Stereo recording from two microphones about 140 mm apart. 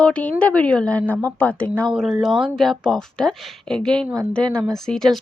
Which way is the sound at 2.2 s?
Centre (ahead or behind).